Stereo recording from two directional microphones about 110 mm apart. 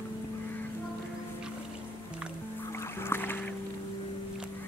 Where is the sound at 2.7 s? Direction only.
20° left (ahead or behind).